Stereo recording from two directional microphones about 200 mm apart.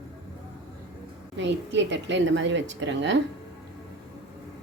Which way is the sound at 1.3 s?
65° right (ahead or behind).